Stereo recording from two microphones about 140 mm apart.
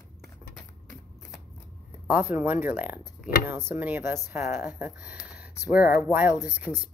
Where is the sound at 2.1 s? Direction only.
15° right (ahead or behind).